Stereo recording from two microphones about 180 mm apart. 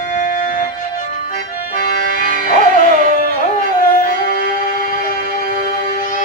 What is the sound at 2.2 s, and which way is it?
Music, 50° right (ahead or behind).